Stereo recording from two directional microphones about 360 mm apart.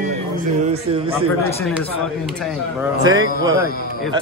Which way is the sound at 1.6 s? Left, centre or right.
Centre.